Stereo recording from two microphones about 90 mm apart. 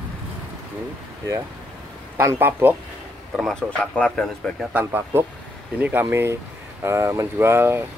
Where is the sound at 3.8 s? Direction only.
15° left (ahead or behind).